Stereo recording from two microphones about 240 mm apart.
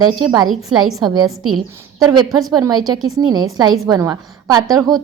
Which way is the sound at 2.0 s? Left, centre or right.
Centre.